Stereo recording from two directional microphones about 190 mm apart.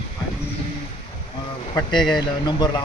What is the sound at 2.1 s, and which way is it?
Speech, 20° left (ahead or behind).